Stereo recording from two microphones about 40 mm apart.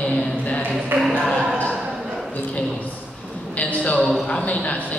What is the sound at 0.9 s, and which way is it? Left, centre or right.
Speech, right.